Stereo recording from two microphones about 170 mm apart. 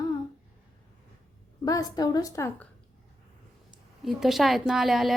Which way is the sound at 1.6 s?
20° left (ahead or behind).